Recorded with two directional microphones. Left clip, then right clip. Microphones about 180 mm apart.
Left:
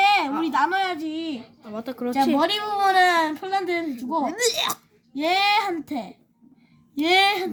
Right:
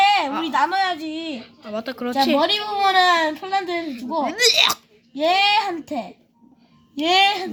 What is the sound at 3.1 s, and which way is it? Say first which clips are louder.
Speech: right 3 dB; 15° right (ahead or behind).